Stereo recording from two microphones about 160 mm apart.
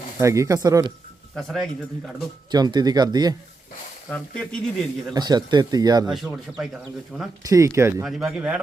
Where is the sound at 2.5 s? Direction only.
25° right (ahead or behind).